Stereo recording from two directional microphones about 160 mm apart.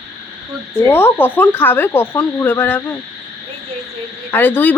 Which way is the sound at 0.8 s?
15° left (ahead or behind).